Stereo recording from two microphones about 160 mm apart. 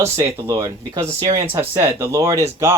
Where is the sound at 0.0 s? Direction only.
15° right (ahead or behind).